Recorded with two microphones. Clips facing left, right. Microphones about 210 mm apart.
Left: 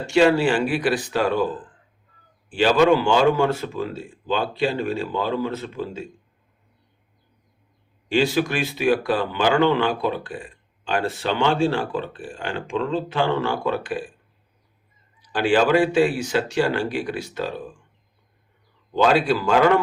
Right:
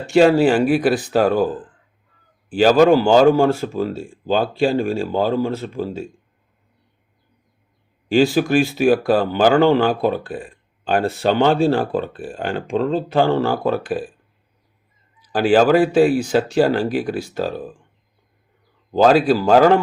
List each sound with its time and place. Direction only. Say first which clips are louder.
0.1 s speech: right 4 dB; 45° right (ahead or behind)
2.5 s speech: right 4 dB; 40° right (ahead or behind)
8.1 s speech: right 6 dB; 40° right (ahead or behind)
15.3 s speech: right 4 dB; 40° right (ahead or behind)
19.0 s speech: right 5 dB; 40° right (ahead or behind)